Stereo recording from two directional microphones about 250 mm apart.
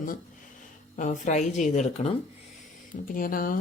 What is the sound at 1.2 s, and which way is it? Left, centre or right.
Speech, left.